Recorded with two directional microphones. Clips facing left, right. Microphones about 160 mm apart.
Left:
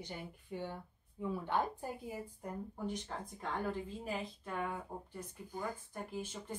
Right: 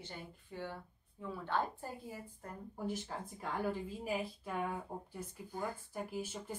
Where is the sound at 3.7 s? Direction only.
10° right (ahead or behind).